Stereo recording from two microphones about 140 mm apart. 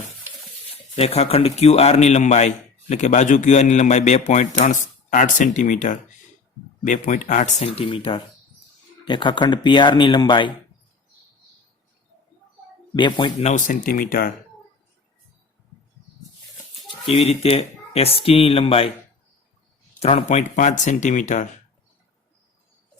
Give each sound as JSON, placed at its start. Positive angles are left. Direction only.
{"t": 0.7, "sound": "a man's voice", "side_deg": 45}
{"t": 7.6, "sound": "speech", "side_deg": 45}
{"t": 12.9, "sound": "speech", "side_deg": 35}
{"t": 13.4, "sound": "speech", "side_deg": 65}
{"t": 17.1, "sound": "speech", "side_deg": 45}
{"t": 20.0, "sound": "a man's voice", "side_deg": 50}